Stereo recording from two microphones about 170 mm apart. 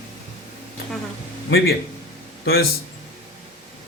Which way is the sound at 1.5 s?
65° left (ahead or behind).